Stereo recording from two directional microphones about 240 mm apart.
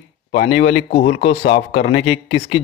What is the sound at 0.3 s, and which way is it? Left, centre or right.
Speech, left.